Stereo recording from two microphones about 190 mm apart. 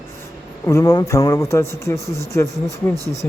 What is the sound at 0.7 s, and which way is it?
Speech, 15° left (ahead or behind).